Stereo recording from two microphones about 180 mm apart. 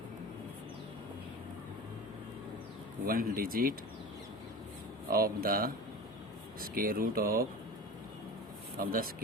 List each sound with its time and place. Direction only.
3.1 s speech: 55° right (ahead or behind)
5.1 s speech: 55° right (ahead or behind)
8.8 s speech: 50° right (ahead or behind)